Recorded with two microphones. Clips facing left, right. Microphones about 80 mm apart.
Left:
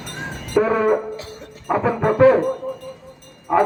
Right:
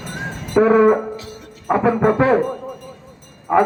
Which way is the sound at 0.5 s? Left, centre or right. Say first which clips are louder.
Right 4 dB; centre.